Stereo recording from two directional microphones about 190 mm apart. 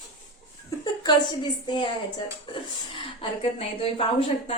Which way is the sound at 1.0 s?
20° left (ahead or behind).